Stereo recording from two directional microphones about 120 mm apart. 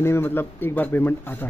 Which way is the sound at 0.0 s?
20° left (ahead or behind).